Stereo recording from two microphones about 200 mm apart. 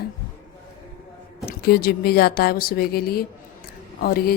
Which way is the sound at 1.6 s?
55° left (ahead or behind).